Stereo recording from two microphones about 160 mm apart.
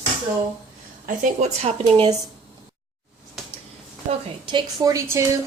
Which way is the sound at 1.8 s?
25° right (ahead or behind).